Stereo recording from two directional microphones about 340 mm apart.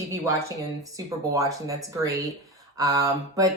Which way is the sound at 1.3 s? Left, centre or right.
Centre.